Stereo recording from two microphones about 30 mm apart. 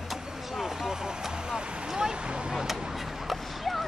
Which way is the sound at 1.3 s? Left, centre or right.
Right.